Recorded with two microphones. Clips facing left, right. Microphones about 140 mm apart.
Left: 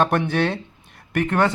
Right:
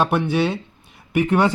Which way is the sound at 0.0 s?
5° right (ahead or behind).